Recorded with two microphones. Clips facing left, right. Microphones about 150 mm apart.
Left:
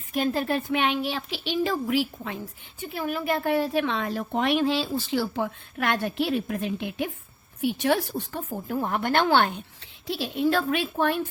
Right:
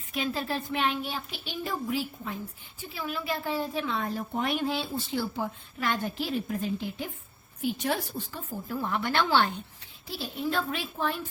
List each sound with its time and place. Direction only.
0.1 s speech: 50° left (ahead or behind); by 2.9 s 80° left
2.9 s a woman's voice: 50° left (ahead or behind)
10.1 s a woman's voice: 75° left (ahead or behind)